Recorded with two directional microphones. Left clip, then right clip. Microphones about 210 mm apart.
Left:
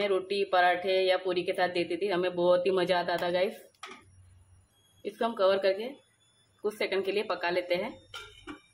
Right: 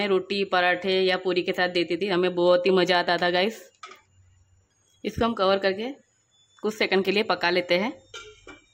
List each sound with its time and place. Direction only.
0.0 s speech: 50° right (ahead or behind)
5.0 s speech: 50° right (ahead or behind)
8.2 s a sound: centre (ahead or behind)